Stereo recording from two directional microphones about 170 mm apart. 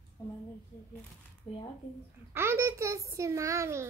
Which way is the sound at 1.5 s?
35° left (ahead or behind).